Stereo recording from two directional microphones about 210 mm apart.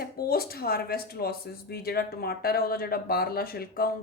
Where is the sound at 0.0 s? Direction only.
45° left (ahead or behind).